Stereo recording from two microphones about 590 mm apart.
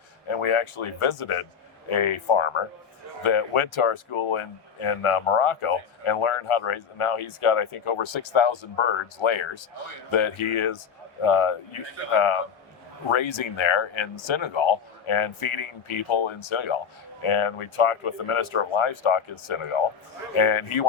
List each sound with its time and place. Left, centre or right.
0.3 s speech: left